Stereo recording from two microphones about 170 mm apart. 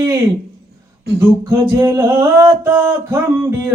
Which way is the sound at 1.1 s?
15° right (ahead or behind).